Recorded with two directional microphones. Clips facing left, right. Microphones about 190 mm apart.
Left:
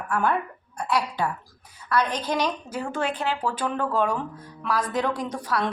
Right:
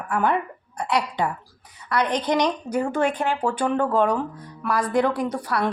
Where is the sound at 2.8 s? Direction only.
55° right (ahead or behind).